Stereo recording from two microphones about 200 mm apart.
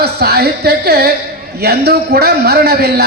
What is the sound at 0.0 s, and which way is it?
A man's voice, 55° right (ahead or behind).